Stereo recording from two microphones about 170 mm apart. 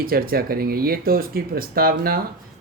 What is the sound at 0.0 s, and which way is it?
Speech, 60° right (ahead or behind).